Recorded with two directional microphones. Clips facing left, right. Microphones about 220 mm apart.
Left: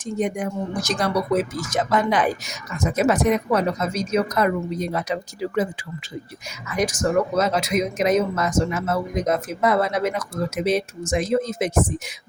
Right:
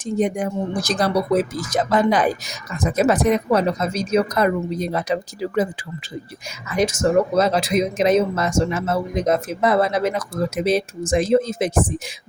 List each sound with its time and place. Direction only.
0.0 s speech: 30° right (ahead or behind)
6.7 s speech: 25° right (ahead or behind)